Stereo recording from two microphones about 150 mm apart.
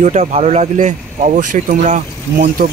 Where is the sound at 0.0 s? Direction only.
55° right (ahead or behind).